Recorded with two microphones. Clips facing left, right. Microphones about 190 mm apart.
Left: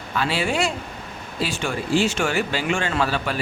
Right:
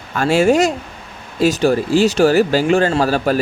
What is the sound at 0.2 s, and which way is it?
Speech, 45° right (ahead or behind).